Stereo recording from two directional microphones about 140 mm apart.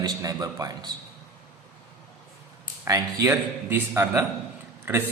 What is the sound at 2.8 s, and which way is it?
A man's voice, 25° right (ahead or behind).